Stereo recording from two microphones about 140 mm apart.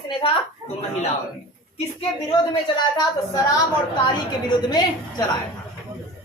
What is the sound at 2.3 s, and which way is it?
A woman's voice, 30° left (ahead or behind).